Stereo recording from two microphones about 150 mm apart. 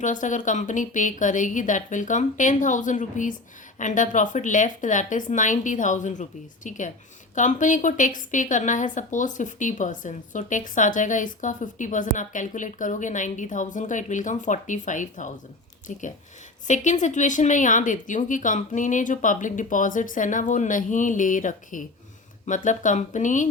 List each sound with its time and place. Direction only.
0.0 s a woman's voice: 55° left (ahead or behind)